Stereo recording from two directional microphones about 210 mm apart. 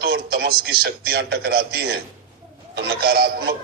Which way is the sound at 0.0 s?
50° right (ahead or behind).